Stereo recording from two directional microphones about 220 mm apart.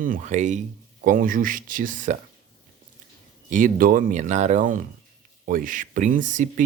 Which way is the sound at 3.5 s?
40° right (ahead or behind).